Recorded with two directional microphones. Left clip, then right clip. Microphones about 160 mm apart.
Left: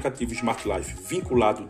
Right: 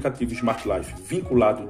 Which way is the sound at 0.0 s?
15° left (ahead or behind).